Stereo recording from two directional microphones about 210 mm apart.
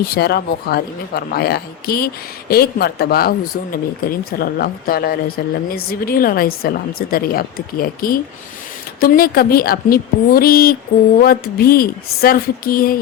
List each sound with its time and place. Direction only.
0.0 s speech: 50° left (ahead or behind)